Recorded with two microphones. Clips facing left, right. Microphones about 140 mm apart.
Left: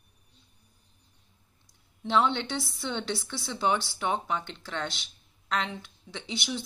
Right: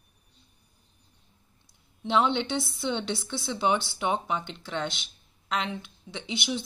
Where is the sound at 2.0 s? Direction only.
20° right (ahead or behind).